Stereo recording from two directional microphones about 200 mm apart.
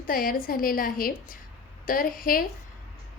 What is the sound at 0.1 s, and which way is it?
A woman's voice, 45° left (ahead or behind).